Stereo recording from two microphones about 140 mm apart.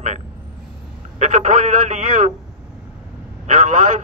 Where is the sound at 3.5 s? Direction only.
65° right (ahead or behind).